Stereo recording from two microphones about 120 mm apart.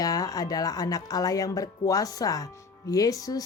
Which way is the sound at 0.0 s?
30° left (ahead or behind).